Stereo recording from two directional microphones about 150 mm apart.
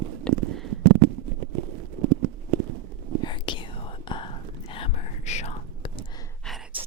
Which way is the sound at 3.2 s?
30° left (ahead or behind).